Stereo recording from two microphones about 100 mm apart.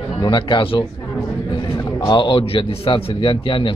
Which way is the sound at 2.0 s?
55° left (ahead or behind).